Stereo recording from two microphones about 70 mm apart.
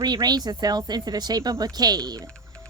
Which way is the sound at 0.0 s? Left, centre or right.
Right.